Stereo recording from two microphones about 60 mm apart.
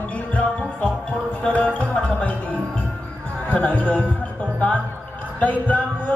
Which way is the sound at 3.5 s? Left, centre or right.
Left.